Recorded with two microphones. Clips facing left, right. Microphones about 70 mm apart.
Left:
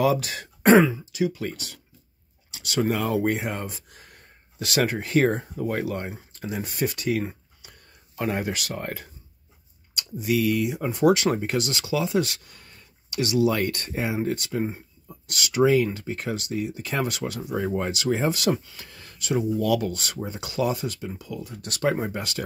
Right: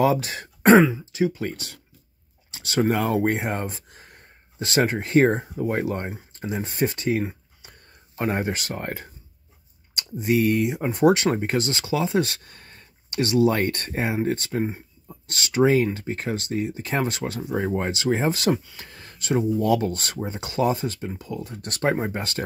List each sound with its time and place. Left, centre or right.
0.0 s speech: right